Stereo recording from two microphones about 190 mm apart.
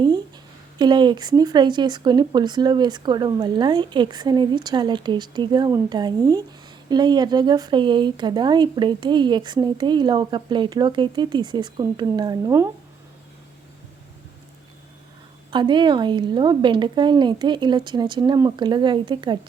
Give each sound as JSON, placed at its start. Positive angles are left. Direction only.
{"t": 0.8, "sound": "speech", "side_deg": -25}
{"t": 15.4, "sound": "speech", "side_deg": -25}